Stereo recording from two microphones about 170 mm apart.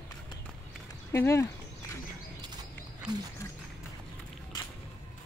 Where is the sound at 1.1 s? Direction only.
15° left (ahead or behind).